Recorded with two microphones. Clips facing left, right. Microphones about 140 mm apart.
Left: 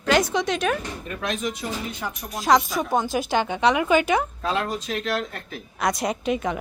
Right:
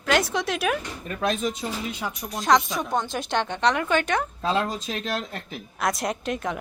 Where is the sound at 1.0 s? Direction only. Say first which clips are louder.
Right 6 dB; 35° right (ahead or behind).